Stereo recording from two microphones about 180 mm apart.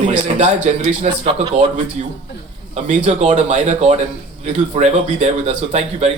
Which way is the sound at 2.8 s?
40° right (ahead or behind).